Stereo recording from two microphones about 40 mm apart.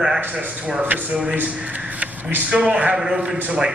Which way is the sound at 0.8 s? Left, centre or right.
Right.